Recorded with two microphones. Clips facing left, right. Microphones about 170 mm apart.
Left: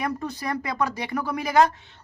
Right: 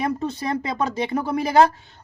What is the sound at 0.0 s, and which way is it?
Speech, 25° right (ahead or behind).